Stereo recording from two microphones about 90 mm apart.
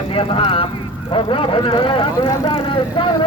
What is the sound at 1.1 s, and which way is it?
Speech, 80° left.